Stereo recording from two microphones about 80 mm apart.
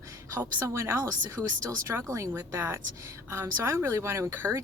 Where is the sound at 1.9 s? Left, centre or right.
Right.